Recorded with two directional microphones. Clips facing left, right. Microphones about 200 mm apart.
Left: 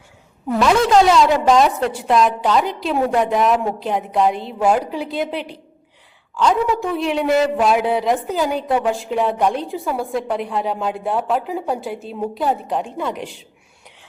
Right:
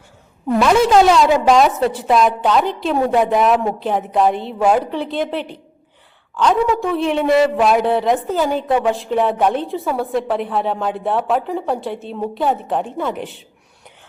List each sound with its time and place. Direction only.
0.4 s a woman's voice: centre (ahead or behind)